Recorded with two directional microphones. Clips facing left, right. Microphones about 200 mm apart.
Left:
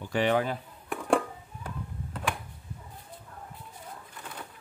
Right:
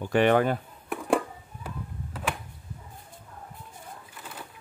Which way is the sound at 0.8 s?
5° right (ahead or behind).